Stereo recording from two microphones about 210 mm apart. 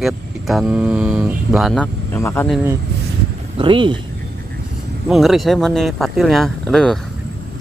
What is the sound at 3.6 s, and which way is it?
Speech, 25° right (ahead or behind).